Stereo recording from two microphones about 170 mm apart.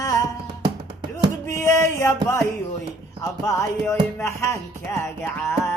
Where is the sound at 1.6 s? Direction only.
15° left (ahead or behind).